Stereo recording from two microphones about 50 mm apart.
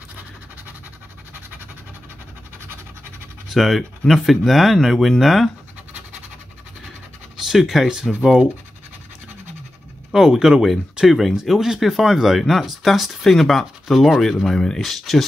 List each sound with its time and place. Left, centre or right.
3.4 s speech: centre
7.3 s speech: centre
10.1 s speech: centre